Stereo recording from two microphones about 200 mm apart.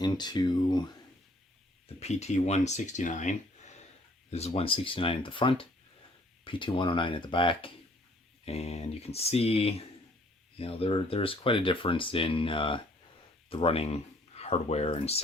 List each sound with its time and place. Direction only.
0.0 s speech: 20° left (ahead or behind)
2.0 s speech: 35° left (ahead or behind)